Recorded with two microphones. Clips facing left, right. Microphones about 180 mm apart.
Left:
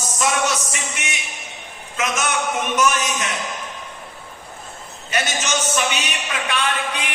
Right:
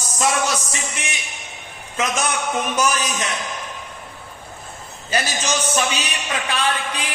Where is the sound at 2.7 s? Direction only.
30° right (ahead or behind).